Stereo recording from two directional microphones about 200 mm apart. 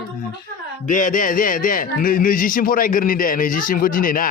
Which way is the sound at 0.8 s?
40° left (ahead or behind).